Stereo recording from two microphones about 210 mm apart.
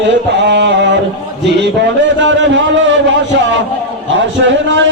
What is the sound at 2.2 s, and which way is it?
Mantra, 60° right (ahead or behind).